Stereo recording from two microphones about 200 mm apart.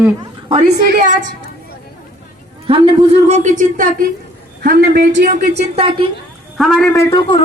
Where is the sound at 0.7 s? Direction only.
40° right (ahead or behind).